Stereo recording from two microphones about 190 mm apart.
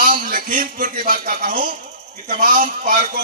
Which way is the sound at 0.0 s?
45° right (ahead or behind).